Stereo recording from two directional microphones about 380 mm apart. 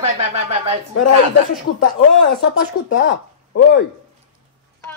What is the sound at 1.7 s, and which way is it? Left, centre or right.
Speech, left.